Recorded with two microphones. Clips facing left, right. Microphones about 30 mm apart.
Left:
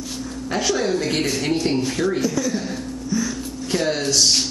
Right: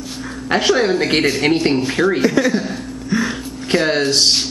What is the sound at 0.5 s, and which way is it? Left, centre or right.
A man's voice, right.